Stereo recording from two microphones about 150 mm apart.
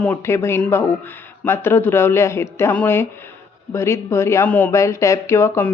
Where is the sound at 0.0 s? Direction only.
15° left (ahead or behind).